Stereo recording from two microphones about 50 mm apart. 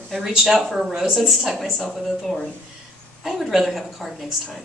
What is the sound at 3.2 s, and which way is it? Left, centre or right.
Speech, centre.